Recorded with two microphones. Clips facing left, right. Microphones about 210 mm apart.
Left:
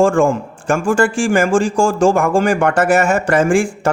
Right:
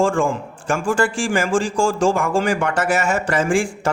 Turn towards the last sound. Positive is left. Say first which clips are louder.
# left 5 dB
turn(degrees=50)  # may be behind; listen again after turning